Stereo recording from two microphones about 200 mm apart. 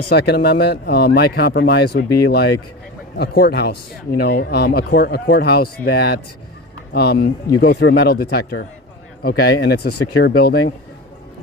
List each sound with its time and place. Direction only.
0.2 s a man's voice: 55° left (ahead or behind)